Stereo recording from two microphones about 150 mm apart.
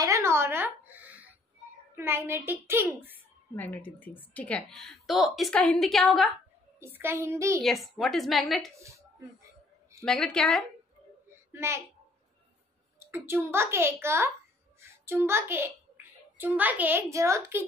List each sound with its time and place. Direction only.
0.0 s a sound: 20° right (ahead or behind)
2.0 s a child's voice: 15° right (ahead or behind)
3.5 s a woman's voice: 10° left (ahead or behind)
6.8 s a child's voice: 15° right (ahead or behind)
7.6 s a woman's voice: centre (ahead or behind)
10.0 s a woman's voice: 5° left (ahead or behind)
11.5 s a woman's voice: 20° right (ahead or behind)
13.0 s a child's voice: 15° right (ahead or behind)